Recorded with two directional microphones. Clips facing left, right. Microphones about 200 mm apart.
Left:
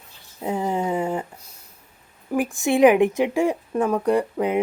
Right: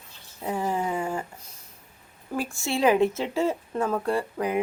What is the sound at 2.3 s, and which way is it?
Speech, 15° left (ahead or behind).